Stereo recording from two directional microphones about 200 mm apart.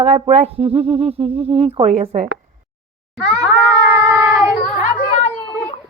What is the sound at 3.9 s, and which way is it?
Cat, 10° right (ahead or behind).